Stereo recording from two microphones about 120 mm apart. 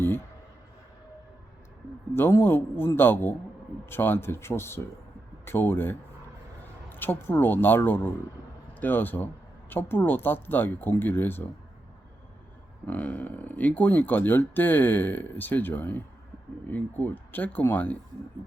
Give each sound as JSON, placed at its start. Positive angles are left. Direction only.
{"t": 2.1, "sound": "speech", "side_deg": 20}
{"t": 12.9, "sound": "speech", "side_deg": 10}